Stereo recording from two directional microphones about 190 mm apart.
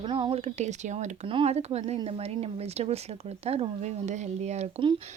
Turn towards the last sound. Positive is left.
turn(degrees=-30)  # may be behind; listen again after turning